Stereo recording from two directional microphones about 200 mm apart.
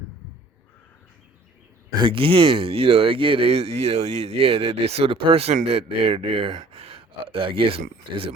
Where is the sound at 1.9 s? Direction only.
25° right (ahead or behind).